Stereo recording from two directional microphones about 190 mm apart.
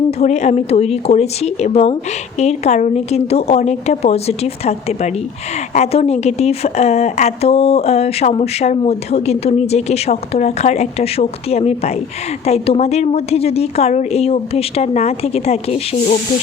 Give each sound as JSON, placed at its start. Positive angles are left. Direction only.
{"t": 0.2, "sound": "a woman's voice", "side_deg": 35}